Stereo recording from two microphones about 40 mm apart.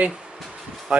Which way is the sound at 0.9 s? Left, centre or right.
Centre.